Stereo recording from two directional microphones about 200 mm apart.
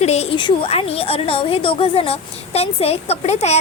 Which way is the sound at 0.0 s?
30° left (ahead or behind).